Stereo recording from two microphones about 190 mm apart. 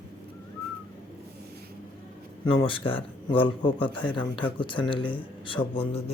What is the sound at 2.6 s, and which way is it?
A man's voice, 25° left (ahead or behind).